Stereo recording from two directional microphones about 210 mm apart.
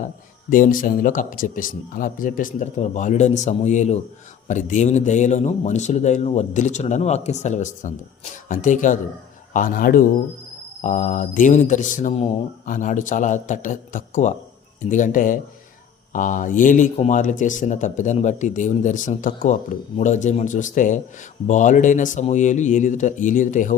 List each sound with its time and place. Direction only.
0.5 s a man's voice: 40° left (ahead or behind)